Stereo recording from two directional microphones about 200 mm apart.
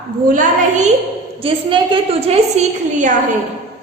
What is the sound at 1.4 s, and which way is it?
A woman's voice, 25° right (ahead or behind).